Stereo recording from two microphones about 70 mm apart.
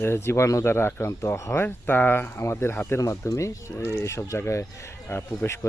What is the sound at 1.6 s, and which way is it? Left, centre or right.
Speech, left.